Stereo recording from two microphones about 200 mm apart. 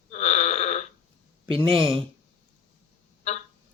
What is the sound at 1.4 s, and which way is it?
Speech, 25° right (ahead or behind).